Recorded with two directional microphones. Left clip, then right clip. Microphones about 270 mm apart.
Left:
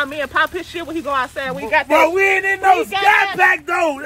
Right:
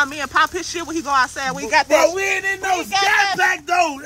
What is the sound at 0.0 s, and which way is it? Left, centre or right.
Speech, centre.